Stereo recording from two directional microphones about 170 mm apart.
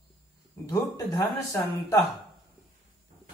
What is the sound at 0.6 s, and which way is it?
A man's voice, 15° left (ahead or behind).